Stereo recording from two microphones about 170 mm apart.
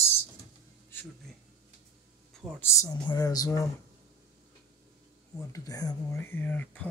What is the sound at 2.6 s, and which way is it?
Speech, 20° left (ahead or behind).